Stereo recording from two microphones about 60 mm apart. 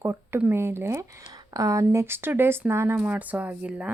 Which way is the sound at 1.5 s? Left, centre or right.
Right.